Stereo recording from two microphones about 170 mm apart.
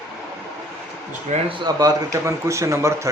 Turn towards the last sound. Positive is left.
turn(degrees=-15)  # may be behind; listen again after turning